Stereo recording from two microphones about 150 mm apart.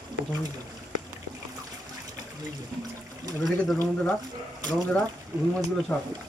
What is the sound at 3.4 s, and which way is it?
Speech, centre (ahead or behind).